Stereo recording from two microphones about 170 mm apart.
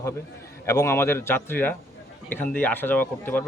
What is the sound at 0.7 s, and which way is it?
Speech, 15° left (ahead or behind).